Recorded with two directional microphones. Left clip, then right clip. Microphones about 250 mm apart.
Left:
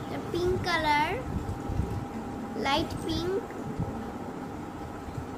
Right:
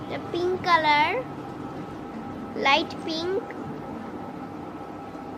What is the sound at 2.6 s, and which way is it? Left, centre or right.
Speech, left.